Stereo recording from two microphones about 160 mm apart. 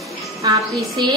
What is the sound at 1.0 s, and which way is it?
Speech, 30° right (ahead or behind).